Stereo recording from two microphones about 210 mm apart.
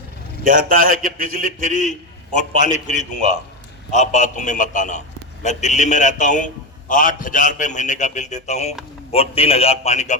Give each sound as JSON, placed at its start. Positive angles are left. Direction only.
{"t": 0.4, "sound": "a man's voice", "side_deg": -40}
{"t": 2.5, "sound": "a man's voice", "side_deg": 35}